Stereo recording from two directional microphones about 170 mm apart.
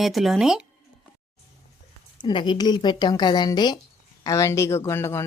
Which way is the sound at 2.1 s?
25° left (ahead or behind).